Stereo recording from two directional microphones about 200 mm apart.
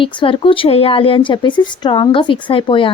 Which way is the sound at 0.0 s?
25° left (ahead or behind).